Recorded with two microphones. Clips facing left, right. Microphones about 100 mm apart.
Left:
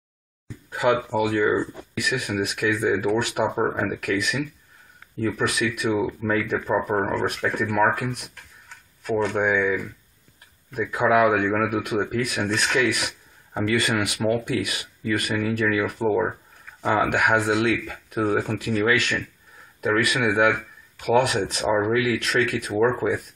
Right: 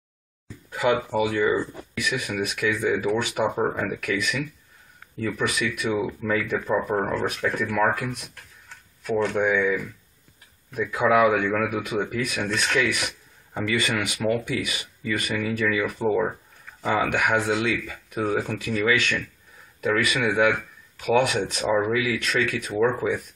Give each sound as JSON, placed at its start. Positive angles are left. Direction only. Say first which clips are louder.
{"t": 0.7, "sound": "speech", "louder": "left 1 dB", "side_deg": 5}
{"t": 3.6, "sound": "speech", "louder": "left 1 dB", "side_deg": 15}
{"t": 4.0, "sound": "speech", "louder": "left 2 dB", "side_deg": 0}
{"t": 10.9, "sound": "speech", "louder": "even", "side_deg": 5}